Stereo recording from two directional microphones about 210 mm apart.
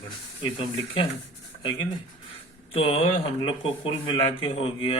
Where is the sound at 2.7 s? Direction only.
25° left (ahead or behind).